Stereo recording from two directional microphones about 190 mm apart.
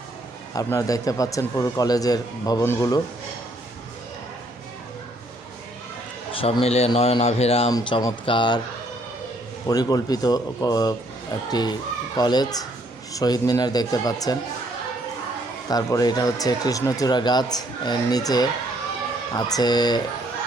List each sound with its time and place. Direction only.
0.5 s speech: 15° left (ahead or behind)
6.3 s speech: 30° left (ahead or behind)
7.7 s speech: 20° left (ahead or behind)
9.6 s speech: 20° left (ahead or behind)
15.7 s speech: 20° left (ahead or behind)